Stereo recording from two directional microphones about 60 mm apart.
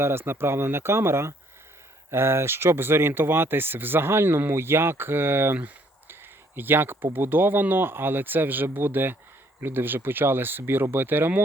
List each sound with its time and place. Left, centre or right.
0.0 s speech: right
6.6 s speech: right